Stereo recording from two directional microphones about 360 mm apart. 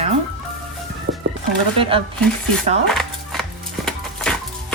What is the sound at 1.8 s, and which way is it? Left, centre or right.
Speech, centre.